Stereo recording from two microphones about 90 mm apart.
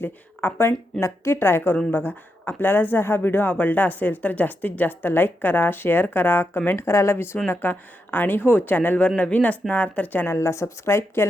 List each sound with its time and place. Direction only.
0.0 s speech: 20° left (ahead or behind)
10.3 s speech: 30° left (ahead or behind)